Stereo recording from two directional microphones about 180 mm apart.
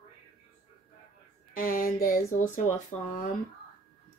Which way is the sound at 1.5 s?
50° left (ahead or behind).